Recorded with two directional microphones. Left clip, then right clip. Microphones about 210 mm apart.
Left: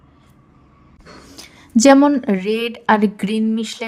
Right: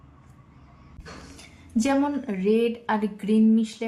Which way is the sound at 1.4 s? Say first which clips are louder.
Left 13 dB; 40° left (ahead or behind).